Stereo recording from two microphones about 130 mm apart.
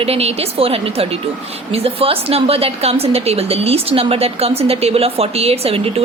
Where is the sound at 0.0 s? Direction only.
50° right (ahead or behind).